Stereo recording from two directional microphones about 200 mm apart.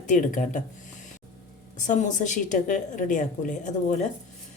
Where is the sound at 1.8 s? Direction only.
40° left (ahead or behind).